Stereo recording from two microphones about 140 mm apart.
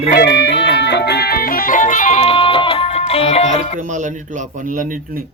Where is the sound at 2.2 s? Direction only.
40° left (ahead or behind).